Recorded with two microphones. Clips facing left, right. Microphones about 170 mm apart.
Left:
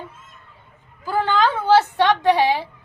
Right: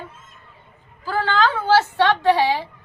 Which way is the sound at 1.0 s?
15° left (ahead or behind).